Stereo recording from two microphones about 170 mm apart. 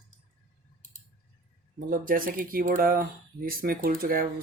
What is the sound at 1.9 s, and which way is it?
Speech, 55° right (ahead or behind).